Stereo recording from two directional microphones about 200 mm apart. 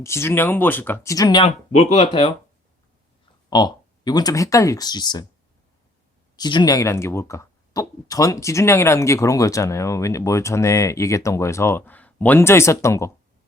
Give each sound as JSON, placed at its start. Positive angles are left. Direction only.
{"t": 0.0, "sound": "speech", "side_deg": 15}
{"t": 3.5, "sound": "speech", "side_deg": 20}
{"t": 6.3, "sound": "speech", "side_deg": 20}